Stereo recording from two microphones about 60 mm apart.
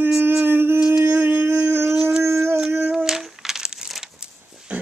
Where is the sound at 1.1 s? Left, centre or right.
Right.